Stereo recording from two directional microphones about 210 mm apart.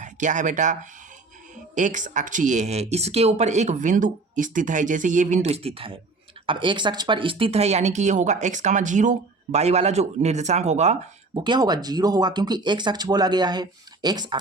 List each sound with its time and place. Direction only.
0.0 s speech: 35° right (ahead or behind)
11.3 s speech: 20° right (ahead or behind)